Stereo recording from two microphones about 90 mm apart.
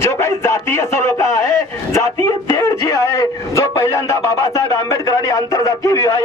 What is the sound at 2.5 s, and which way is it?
Speech, 35° left (ahead or behind).